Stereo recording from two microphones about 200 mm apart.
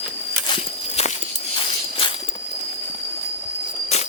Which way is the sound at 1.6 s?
25° left (ahead or behind).